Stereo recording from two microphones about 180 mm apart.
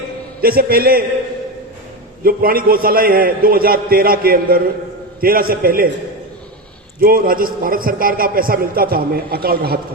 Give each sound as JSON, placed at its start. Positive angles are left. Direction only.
{"t": 0.4, "sound": "a man's voice", "side_deg": -55}
{"t": 2.2, "sound": "a man's voice", "side_deg": -55}
{"t": 7.0, "sound": "a man's voice", "side_deg": -55}